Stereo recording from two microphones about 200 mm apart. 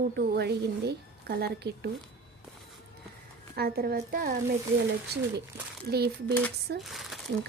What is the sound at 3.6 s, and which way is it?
A woman's voice, 50° right (ahead or behind).